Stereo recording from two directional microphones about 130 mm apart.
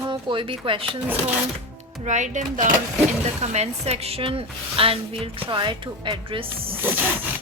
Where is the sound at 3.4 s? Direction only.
60° right (ahead or behind); by 6.7 s 40° right (ahead or behind).